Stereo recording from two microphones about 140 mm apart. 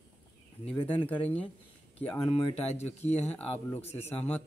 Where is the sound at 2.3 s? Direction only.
45° left (ahead or behind).